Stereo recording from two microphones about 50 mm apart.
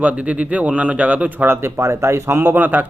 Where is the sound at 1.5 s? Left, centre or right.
Right.